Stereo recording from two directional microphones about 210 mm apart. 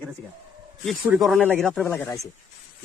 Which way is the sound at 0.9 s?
Centre (ahead or behind).